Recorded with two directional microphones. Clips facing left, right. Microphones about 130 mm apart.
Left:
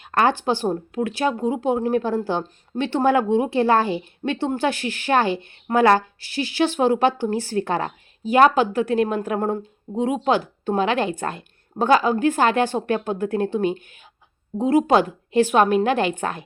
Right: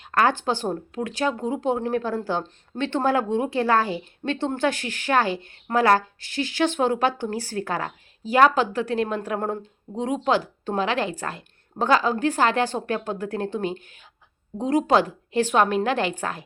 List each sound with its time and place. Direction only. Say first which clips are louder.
0.1 s a woman's voice: left 2 dB; 20° left (ahead or behind)